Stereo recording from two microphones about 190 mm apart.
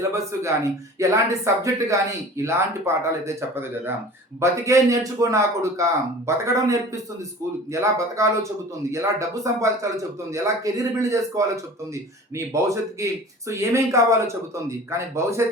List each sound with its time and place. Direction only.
0.1 s speech: 15° right (ahead or behind)
12.6 s speech: 15° right (ahead or behind)